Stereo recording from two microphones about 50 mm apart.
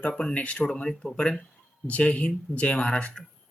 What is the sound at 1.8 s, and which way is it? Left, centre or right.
Speech, left.